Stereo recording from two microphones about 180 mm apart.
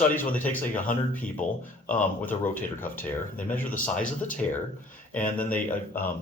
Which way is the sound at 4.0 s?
45° left (ahead or behind).